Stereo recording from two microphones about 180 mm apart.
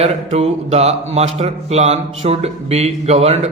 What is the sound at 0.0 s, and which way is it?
Speech, 35° right (ahead or behind).